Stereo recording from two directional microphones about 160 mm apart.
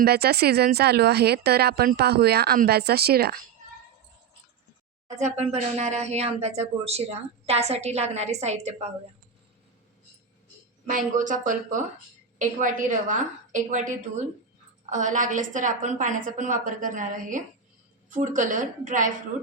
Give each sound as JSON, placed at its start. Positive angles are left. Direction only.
{"t": 0.0, "sound": "speech", "side_deg": -80}
{"t": 5.0, "sound": "speech", "side_deg": -45}
{"t": 10.8, "sound": "speech", "side_deg": -55}